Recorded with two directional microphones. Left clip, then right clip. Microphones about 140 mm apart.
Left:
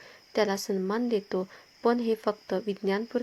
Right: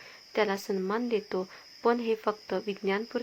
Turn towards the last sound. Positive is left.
turn(degrees=40)  # may be behind; listen again after turning